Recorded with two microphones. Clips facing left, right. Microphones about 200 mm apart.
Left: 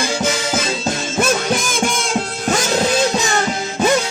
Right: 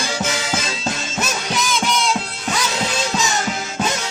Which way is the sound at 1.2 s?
50° left (ahead or behind).